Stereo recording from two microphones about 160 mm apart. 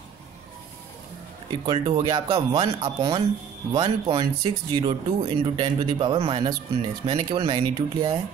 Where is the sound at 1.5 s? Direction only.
30° right (ahead or behind).